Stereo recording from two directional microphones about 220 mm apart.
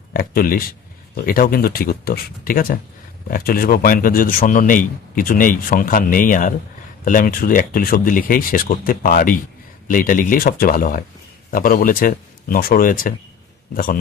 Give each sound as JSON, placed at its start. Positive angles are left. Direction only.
{"t": 0.1, "sound": "a man's voice", "side_deg": 40}